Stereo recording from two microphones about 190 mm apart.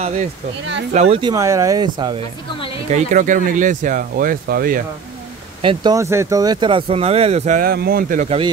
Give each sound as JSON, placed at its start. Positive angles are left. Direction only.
{"t": 0.0, "sound": "speech", "side_deg": -35}
{"t": 1.3, "sound": "speech", "side_deg": -15}
{"t": 2.9, "sound": "speech", "side_deg": -45}
{"t": 5.6, "sound": "speech", "side_deg": -25}
{"t": 5.9, "sound": "speech", "side_deg": -15}